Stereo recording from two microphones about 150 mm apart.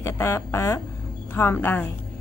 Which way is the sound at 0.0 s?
15° left (ahead or behind).